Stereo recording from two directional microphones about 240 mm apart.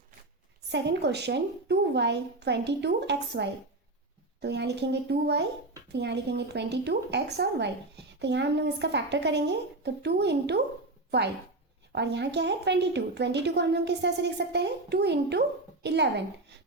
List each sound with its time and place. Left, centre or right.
0.7 s speech: right
11.9 s speech: right